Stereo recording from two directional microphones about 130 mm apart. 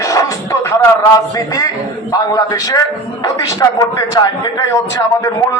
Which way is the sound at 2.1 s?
25° left (ahead or behind).